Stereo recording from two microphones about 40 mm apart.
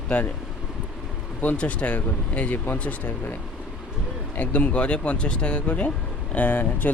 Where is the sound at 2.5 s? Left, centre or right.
Left.